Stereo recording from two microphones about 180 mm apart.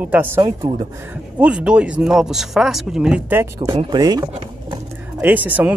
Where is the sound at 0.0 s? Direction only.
10° right (ahead or behind).